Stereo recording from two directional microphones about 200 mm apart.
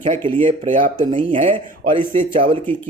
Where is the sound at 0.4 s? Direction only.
25° right (ahead or behind).